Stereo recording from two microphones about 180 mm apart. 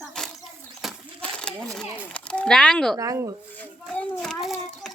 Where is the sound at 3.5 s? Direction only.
10° left (ahead or behind).